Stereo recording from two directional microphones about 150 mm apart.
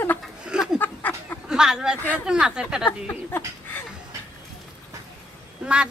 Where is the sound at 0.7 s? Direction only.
10° left (ahead or behind).